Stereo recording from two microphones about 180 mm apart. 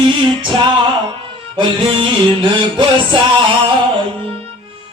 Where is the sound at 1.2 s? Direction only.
25° right (ahead or behind).